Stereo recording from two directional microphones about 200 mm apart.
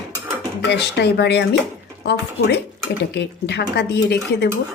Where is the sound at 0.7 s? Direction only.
55° left (ahead or behind).